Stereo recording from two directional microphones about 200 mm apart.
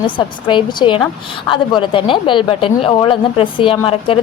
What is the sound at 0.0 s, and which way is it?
Speech, 25° left (ahead or behind).